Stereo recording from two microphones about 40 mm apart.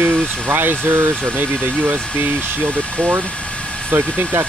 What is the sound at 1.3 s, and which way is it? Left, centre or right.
Speech, right.